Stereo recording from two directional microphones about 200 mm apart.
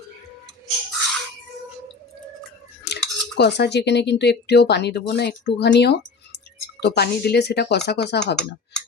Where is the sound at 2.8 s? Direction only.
55° left (ahead or behind).